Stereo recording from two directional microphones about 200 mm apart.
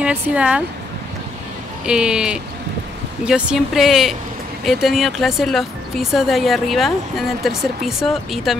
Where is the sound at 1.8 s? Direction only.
5° right (ahead or behind).